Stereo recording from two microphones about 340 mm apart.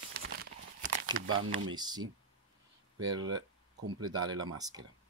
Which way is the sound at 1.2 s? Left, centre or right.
Right.